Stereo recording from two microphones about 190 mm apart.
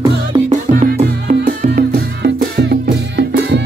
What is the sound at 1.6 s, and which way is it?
Music, 50° right (ahead or behind).